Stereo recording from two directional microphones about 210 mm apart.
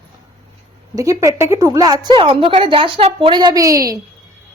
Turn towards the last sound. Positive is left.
turn(degrees=-15)  # may be behind; listen again after turning